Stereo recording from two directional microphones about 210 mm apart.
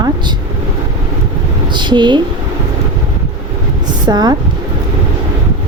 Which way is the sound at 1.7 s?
20° right (ahead or behind).